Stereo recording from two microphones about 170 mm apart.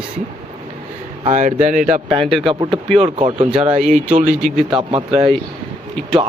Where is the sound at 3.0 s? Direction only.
35° right (ahead or behind).